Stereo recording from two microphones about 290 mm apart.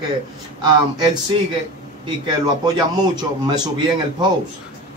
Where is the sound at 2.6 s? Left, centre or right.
Centre.